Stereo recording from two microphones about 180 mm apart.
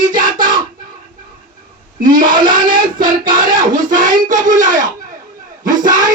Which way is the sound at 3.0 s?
50° right (ahead or behind).